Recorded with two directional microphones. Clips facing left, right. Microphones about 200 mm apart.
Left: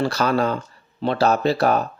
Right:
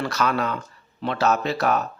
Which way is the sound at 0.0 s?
30° left (ahead or behind).